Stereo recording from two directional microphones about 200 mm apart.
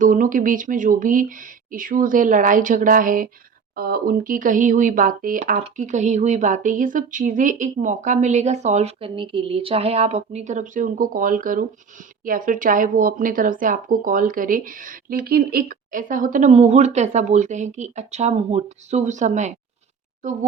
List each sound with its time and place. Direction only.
0.0 s speech: 40° right (ahead or behind)